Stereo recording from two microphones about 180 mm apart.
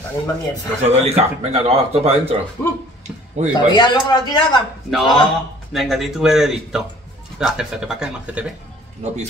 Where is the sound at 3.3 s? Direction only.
40° right (ahead or behind).